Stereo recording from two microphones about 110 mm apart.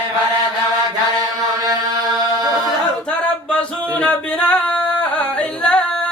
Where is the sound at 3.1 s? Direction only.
10° left (ahead or behind).